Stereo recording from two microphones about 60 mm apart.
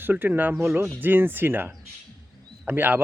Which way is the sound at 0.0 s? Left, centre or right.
Right.